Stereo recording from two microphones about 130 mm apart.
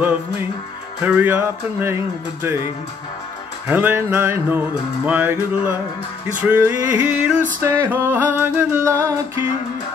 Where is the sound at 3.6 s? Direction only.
15° right (ahead or behind).